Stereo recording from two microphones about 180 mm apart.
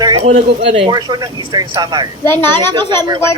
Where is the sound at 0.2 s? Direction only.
40° right (ahead or behind).